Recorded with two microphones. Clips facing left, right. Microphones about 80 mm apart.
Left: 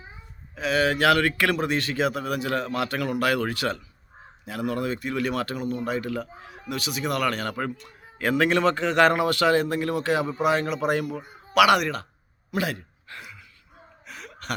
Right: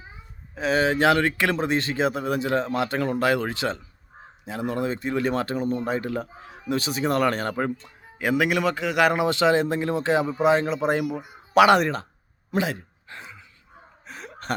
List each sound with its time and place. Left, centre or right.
0.5 s speech: right; by 9.1 s centre
9.1 s speech: right
12.5 s a sound: right
14.1 s gasp: right